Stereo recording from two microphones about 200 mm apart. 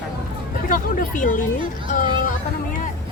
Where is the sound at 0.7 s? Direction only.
40° left (ahead or behind).